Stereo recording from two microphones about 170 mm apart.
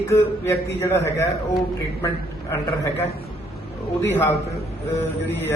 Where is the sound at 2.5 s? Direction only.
15° left (ahead or behind).